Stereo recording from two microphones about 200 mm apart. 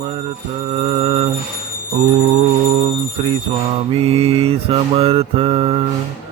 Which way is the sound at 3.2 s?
25° right (ahead or behind).